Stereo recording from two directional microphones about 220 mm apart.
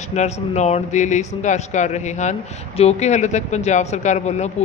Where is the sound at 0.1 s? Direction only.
30° left (ahead or behind).